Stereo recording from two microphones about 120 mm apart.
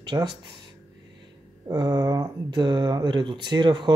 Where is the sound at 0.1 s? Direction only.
25° right (ahead or behind).